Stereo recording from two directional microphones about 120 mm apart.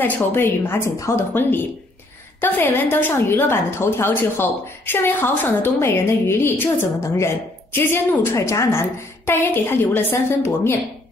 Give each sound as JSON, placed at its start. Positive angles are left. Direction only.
{"t": 0.0, "sound": "a woman's voice", "side_deg": 20}